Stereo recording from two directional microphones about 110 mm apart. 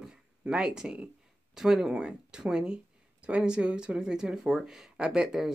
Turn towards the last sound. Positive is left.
turn(degrees=-5)  # may be behind; listen again after turning